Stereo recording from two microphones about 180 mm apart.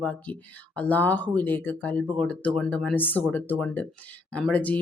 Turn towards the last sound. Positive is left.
turn(degrees=10)  # may be behind; listen again after turning